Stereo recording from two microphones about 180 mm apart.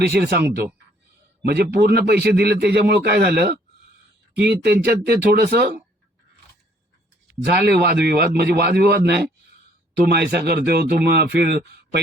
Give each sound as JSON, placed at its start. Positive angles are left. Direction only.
{"t": 0.1, "sound": "a man's voice", "side_deg": -60}
{"t": 7.4, "sound": "a man's voice", "side_deg": -65}